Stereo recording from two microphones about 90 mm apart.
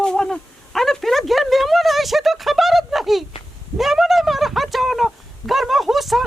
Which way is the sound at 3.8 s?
5° right (ahead or behind).